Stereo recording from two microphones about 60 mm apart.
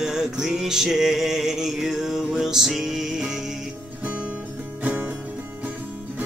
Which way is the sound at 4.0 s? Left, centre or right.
Right.